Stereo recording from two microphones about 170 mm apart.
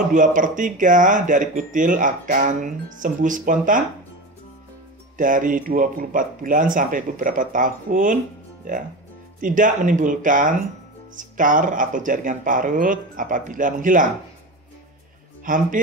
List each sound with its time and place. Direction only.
0.1 s speech: 50° right (ahead or behind)
5.1 s speech: 50° right (ahead or behind)
9.4 s speech: 50° right (ahead or behind)
15.4 s speech: 50° right (ahead or behind)